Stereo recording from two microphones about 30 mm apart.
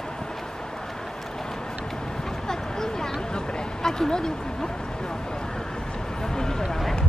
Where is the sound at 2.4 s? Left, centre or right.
Centre.